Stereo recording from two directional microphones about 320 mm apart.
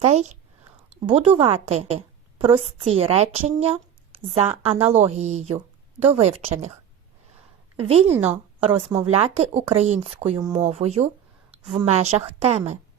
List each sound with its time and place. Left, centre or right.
0.0 s a woman's voice: right
7.8 s a woman's voice: centre